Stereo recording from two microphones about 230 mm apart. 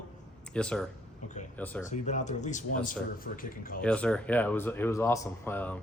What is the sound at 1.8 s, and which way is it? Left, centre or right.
Speech, left.